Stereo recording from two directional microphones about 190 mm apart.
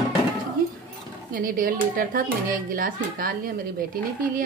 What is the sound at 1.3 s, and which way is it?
A woman's voice, 50° right (ahead or behind).